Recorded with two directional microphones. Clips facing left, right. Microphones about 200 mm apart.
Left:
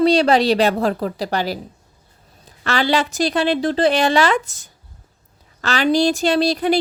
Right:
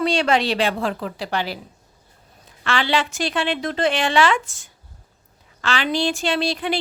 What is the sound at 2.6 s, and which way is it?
Speech, 40° left (ahead or behind).